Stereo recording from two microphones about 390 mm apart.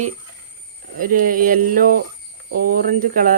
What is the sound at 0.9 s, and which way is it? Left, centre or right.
Speech, right.